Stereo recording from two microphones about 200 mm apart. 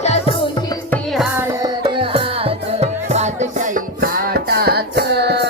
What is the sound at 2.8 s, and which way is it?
Music, 35° right (ahead or behind).